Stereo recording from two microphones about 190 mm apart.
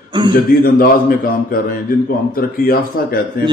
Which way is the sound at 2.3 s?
50° left (ahead or behind).